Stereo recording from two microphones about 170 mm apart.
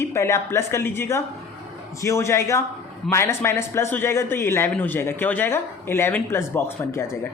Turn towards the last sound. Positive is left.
turn(degrees=15)  # may be behind; listen again after turning